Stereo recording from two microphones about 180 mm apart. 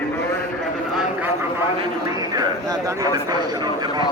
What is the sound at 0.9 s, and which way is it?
Speech, 5° right (ahead or behind).